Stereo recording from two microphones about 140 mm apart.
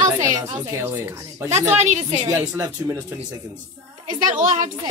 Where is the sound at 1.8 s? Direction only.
60° right (ahead or behind).